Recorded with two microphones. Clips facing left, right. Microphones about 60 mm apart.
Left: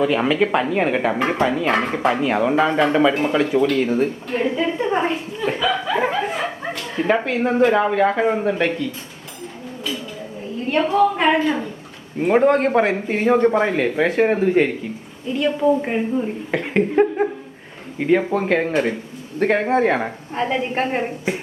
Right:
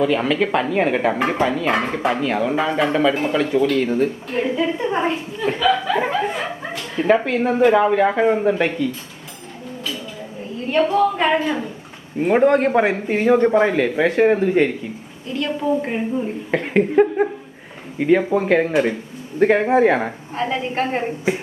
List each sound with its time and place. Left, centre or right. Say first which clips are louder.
0.0 s a woman's voice: even; centre
2.3 s dog: left 2 dB; centre
2.6 s a woman's voice: left 3 dB; centre
5.5 s dog: right 3 dB; centre
6.9 s a woman's voice: right 3 dB; centre
10.9 s a woman's voice: left 1 dB; centre
20.3 s dog: left 1 dB; centre